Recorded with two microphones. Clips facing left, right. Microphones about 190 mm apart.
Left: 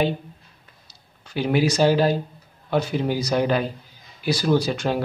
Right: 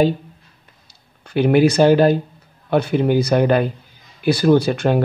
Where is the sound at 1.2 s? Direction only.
55° right (ahead or behind).